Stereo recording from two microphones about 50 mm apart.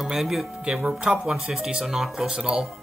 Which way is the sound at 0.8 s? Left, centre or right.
Centre.